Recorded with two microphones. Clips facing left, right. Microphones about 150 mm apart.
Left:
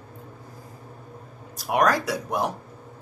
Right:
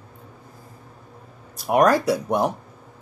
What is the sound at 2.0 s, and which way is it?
Speech, centre (ahead or behind).